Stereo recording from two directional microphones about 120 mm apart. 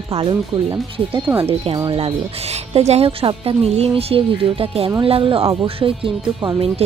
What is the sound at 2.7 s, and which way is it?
Speech, 60° right (ahead or behind).